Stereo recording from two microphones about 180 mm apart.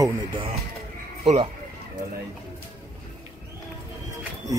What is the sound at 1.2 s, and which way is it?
Speech, 35° right (ahead or behind).